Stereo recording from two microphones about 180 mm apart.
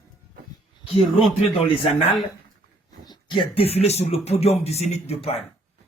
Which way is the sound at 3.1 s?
25° left (ahead or behind).